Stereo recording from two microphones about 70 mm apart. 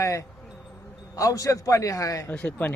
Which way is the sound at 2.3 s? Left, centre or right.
Left.